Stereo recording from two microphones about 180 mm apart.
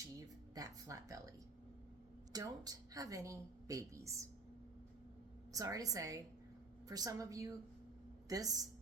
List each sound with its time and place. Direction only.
0.5 s speech: 20° right (ahead or behind)
2.3 s a woman's voice: 20° right (ahead or behind)
5.5 s a woman's voice: 20° right (ahead or behind)